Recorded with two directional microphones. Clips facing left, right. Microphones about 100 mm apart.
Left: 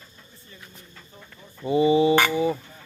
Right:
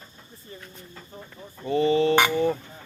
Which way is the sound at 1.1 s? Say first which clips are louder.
Right 6 dB; 40° right (ahead or behind).